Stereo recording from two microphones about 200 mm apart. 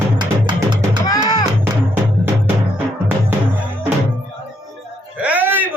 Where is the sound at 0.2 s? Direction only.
20° right (ahead or behind).